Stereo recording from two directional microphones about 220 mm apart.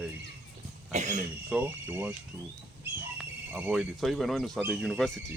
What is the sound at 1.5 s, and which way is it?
Speech, 10° right (ahead or behind).